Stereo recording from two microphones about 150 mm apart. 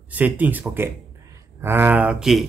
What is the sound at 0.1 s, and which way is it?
Speech, 10° right (ahead or behind).